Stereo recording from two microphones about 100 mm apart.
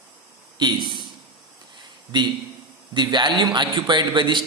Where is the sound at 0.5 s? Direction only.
50° right (ahead or behind).